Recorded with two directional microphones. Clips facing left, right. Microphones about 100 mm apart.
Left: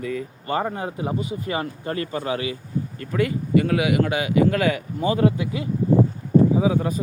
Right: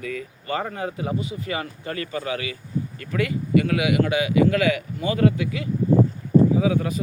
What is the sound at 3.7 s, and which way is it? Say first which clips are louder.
Speech: even; 35° left (ahead or behind).